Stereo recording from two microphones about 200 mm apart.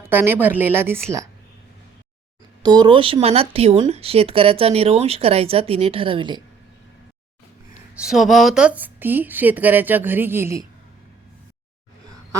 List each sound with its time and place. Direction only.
0.0 s speech: 10° right (ahead or behind)
2.6 s speech: 20° right (ahead or behind)
7.9 s speech: centre (ahead or behind)